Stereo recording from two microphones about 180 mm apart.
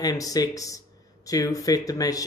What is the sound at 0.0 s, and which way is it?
Speech, 20° left (ahead or behind).